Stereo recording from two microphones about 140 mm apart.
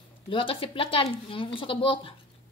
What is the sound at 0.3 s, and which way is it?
Speech, 40° left (ahead or behind).